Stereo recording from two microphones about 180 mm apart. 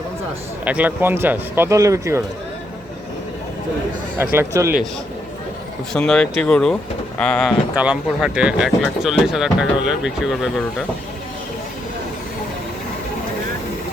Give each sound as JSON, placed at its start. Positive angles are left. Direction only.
{"t": 0.6, "sound": "speech", "side_deg": -10}
{"t": 4.2, "sound": "speech", "side_deg": -10}
{"t": 5.9, "sound": "speech", "side_deg": 5}
{"t": 7.8, "sound": "speech", "side_deg": -5}